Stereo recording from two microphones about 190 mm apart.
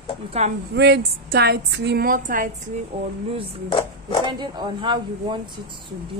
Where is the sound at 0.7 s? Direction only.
60° right (ahead or behind); by 2.5 s 45° right (ahead or behind).